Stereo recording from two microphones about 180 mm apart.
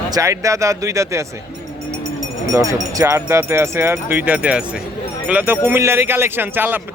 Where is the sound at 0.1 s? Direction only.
15° right (ahead or behind).